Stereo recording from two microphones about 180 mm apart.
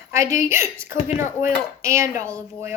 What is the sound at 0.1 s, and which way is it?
A woman's voice, 15° right (ahead or behind).